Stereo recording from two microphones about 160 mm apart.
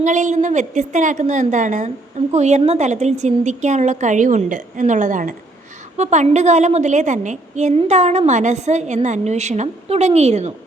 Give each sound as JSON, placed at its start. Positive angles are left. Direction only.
{"t": 0.0, "sound": "a woman's voice", "side_deg": -50}